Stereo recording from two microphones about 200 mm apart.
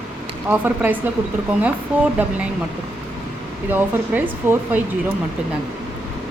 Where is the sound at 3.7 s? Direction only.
10° right (ahead or behind).